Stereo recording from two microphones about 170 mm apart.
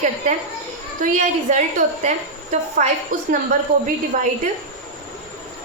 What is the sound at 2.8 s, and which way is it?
Speech, 45° right (ahead or behind).